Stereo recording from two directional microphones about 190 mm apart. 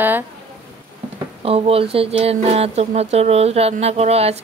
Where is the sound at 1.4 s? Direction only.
30° right (ahead or behind).